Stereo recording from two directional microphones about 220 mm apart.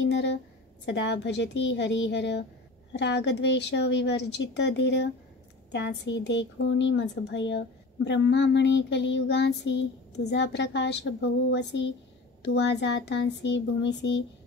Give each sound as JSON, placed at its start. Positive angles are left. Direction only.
{"t": 0.1, "sound": "a woman's voice", "side_deg": 55}